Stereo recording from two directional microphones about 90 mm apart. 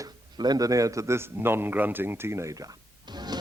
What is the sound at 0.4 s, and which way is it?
Speech, 45° right (ahead or behind).